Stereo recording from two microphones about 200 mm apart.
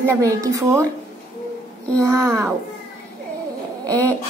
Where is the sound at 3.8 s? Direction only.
15° right (ahead or behind).